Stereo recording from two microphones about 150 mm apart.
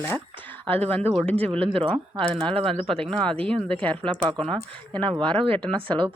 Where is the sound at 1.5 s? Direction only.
35° right (ahead or behind).